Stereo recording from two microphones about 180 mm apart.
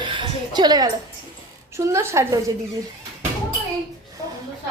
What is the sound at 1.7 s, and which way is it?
Speech, 15° right (ahead or behind).